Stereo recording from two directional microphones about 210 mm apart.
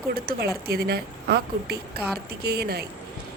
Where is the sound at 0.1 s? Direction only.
45° right (ahead or behind).